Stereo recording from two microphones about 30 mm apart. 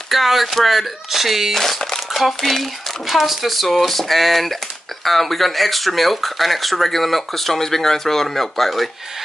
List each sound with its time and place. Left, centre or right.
0.1 s speech: centre